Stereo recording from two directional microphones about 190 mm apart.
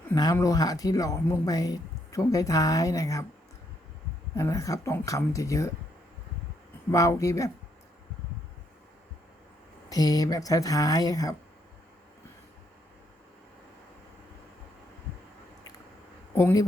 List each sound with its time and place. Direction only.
0.1 s speech: 20° left (ahead or behind)
4.4 s speech: 15° left (ahead or behind)
6.9 s speech: 15° left (ahead or behind)
9.9 s speech: 20° left (ahead or behind)
16.4 s speech: 15° left (ahead or behind)